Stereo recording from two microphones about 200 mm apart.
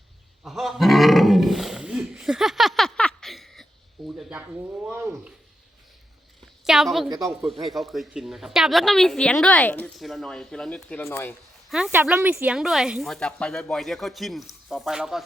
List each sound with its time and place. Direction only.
0.4 s roaring cats: centre (ahead or behind)
4.9 s speech: 10° right (ahead or behind)
6.7 s speech: centre (ahead or behind)
11.7 s speech: 5° right (ahead or behind)